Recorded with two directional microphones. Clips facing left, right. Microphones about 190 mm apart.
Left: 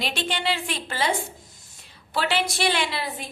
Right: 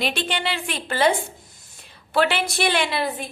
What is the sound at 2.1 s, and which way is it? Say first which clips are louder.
Speech: right 4 dB; 55° right (ahead or behind).